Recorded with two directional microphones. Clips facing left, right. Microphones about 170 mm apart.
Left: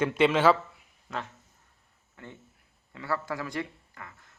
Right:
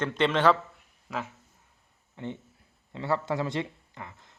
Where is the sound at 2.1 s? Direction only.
20° right (ahead or behind).